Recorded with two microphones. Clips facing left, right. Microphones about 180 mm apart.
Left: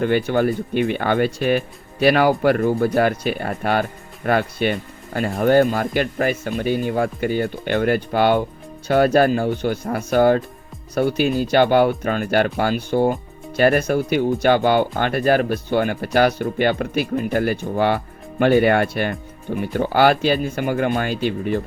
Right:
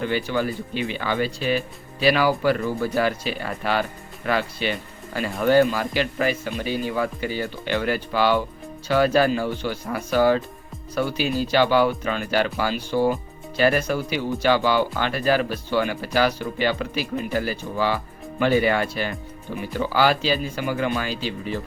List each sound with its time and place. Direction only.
0.0 s speech: 50° left (ahead or behind)